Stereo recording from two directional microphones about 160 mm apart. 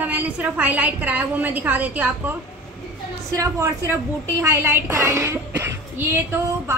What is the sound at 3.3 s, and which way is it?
A woman's voice, 20° right (ahead or behind).